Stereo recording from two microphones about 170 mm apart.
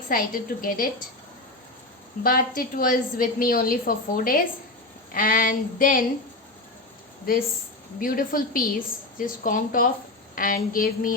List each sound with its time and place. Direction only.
0.1 s a woman's voice: 55° left (ahead or behind)
2.2 s a woman's voice: 55° left (ahead or behind)
7.3 s a woman's voice: 60° left (ahead or behind)